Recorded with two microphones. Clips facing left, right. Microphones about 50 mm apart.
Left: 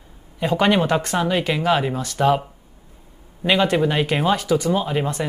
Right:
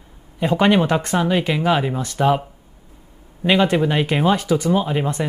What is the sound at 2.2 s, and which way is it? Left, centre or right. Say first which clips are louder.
Speech: even; centre.